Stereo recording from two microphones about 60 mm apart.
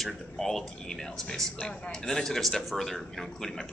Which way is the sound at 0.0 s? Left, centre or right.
Centre.